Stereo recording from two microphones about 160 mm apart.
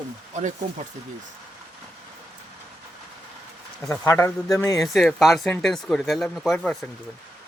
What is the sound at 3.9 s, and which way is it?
Speech, 15° left (ahead or behind).